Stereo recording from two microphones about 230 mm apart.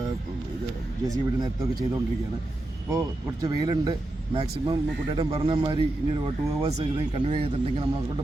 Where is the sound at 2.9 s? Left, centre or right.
Centre.